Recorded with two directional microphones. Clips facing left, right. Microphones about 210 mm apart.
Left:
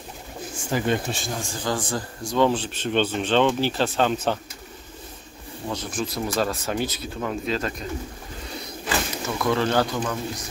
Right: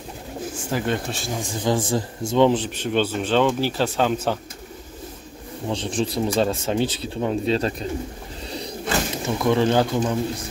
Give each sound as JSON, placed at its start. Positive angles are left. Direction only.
{"t": 0.7, "sound": "speech", "side_deg": 0}
{"t": 1.3, "sound": "speech", "side_deg": -20}
{"t": 5.7, "sound": "speech", "side_deg": -30}
{"t": 8.5, "sound": "power windows", "side_deg": -35}
{"t": 9.2, "sound": "speech", "side_deg": -20}